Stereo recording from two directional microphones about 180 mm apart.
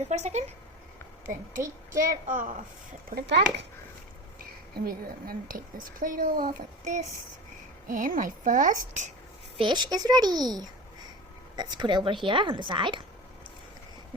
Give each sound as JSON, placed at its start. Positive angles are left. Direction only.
{"t": 0.0, "sound": "a woman's voice", "side_deg": -40}
{"t": 2.0, "sound": "a woman's voice", "side_deg": -45}
{"t": 3.2, "sound": "a child's voice", "side_deg": -70}
{"t": 4.9, "sound": "a woman's voice", "side_deg": -55}
{"t": 9.6, "sound": "a woman's voice", "side_deg": -25}